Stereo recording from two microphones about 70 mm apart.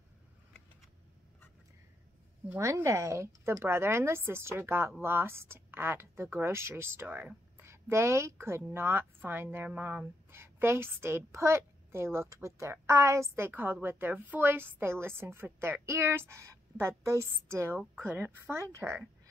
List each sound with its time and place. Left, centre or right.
2.6 s a woman's voice: right
7.1 s speech: right
7.6 s a woman's voice: right
9.7 s a woman's voice: right
10.3 s a woman's voice: right
13.5 s a woman's voice: right
15.4 s a woman's voice: right
15.8 s a woman's voice: right
17.7 s a woman's voice: right